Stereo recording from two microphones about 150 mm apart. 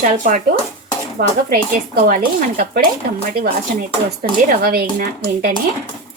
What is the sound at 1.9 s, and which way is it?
Speech, 65° right (ahead or behind).